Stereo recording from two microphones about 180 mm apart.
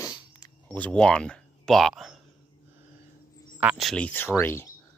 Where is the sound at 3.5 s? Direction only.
5° right (ahead or behind); by 4.7 s 10° left (ahead or behind).